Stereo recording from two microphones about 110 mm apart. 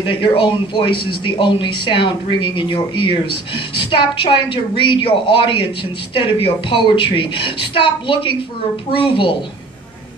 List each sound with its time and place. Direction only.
0.1 s speech: 50° left (ahead or behind)